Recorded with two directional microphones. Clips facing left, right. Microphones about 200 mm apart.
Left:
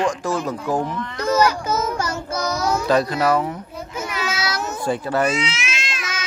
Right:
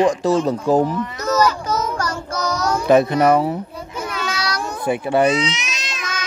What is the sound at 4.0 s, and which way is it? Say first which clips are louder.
Child singing: right 1 dB; 5° left (ahead or behind).